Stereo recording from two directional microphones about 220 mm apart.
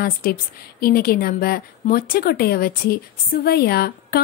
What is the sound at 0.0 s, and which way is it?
A woman's voice, 40° left (ahead or behind).